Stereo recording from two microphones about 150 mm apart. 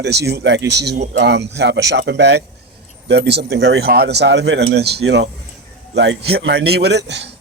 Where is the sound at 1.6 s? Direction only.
90° right.